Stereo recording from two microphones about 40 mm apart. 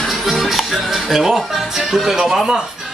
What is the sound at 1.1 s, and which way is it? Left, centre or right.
Speech, centre.